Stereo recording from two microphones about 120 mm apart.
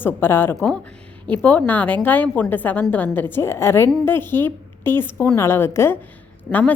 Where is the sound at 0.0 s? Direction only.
20° left (ahead or behind).